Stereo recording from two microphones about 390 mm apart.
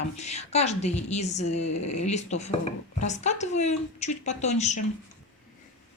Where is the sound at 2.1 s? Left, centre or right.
Centre.